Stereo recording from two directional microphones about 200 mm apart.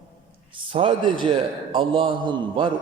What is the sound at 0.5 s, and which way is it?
A man's voice, 25° right (ahead or behind).